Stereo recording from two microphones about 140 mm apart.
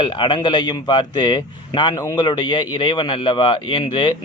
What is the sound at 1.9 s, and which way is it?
A man's voice, 20° left (ahead or behind).